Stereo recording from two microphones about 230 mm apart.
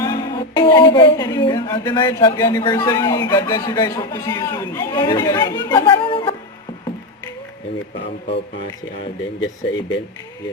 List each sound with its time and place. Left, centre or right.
0.0 s speech: centre